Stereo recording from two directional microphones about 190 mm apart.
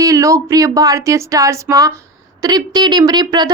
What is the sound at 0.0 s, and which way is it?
A woman's voice, 15° right (ahead or behind).